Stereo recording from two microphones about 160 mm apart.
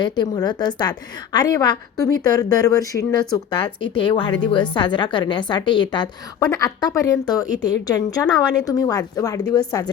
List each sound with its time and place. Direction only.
0.0 s a woman's voice: 25° left (ahead or behind)